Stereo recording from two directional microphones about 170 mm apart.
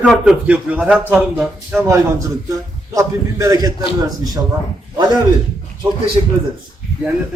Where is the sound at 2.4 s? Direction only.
20° right (ahead or behind).